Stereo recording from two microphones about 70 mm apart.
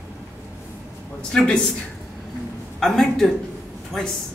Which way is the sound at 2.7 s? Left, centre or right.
Centre.